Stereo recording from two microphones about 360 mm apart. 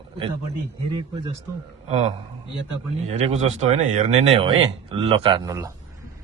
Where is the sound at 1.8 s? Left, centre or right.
Centre.